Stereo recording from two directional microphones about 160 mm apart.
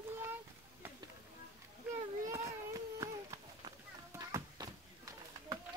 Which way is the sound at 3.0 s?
20° right (ahead or behind).